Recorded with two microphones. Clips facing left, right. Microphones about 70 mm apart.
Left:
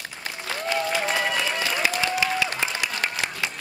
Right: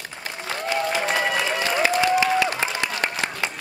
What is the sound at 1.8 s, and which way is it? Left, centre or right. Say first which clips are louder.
Applause: right 7 dB; right.